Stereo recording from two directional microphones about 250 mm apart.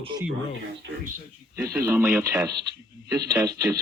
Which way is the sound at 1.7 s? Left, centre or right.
Centre.